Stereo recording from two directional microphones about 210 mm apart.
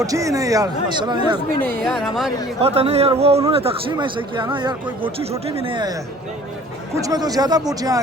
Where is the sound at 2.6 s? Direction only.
30° right (ahead or behind).